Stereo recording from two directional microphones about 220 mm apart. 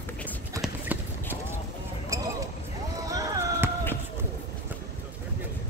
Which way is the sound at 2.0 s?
15° right (ahead or behind).